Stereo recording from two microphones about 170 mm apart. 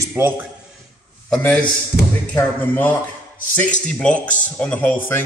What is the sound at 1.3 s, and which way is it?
Speech, 5° left (ahead or behind).